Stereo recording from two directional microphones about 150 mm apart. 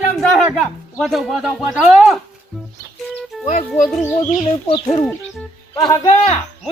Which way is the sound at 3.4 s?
55° left (ahead or behind).